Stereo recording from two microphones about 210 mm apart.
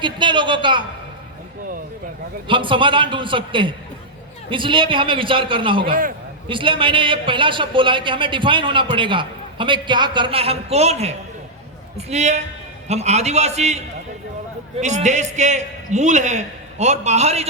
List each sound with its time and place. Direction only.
0.0 s a man's voice: 20° right (ahead or behind)
2.5 s a man's voice: 25° right (ahead or behind)
5.9 s a man's voice: 40° right (ahead or behind)
6.5 s a man's voice: 25° right (ahead or behind)